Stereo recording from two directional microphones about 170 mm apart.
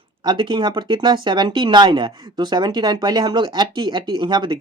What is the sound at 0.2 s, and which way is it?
Speech, 25° right (ahead or behind).